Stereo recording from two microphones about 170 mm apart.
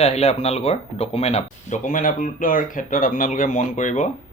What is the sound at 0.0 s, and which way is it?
Speech, 40° left (ahead or behind).